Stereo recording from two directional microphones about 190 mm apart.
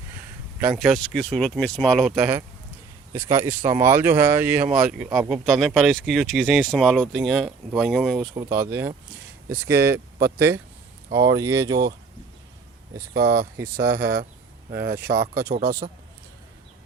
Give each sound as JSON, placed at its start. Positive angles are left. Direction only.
{"t": 0.6, "sound": "speech", "side_deg": -5}
{"t": 8.4, "sound": "speech", "side_deg": -15}
{"t": 13.1, "sound": "speech", "side_deg": -55}